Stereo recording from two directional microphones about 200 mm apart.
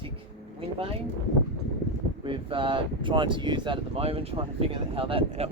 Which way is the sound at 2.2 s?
25° right (ahead or behind).